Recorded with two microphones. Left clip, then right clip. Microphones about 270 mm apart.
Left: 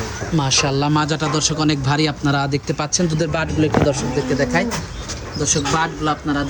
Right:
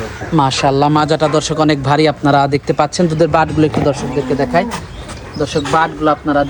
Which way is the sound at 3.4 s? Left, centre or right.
Centre.